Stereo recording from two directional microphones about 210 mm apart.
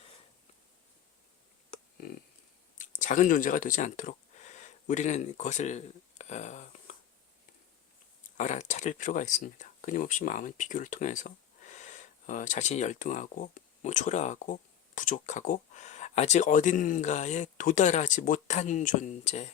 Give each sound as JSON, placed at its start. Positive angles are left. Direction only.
{"t": 2.7, "sound": "speech", "side_deg": 35}
{"t": 8.4, "sound": "speech", "side_deg": 35}